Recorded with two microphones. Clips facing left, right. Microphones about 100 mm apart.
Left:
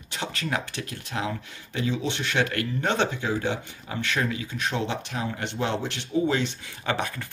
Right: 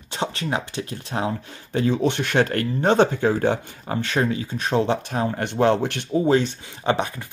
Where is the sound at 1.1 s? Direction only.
35° right (ahead or behind); by 6.3 s 55° right (ahead or behind).